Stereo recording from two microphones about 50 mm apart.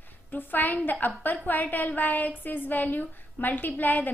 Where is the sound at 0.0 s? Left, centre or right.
Left.